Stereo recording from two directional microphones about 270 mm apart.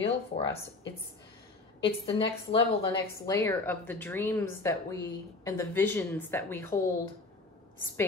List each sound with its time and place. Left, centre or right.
0.0 s speech: left
1.8 s a woman's voice: centre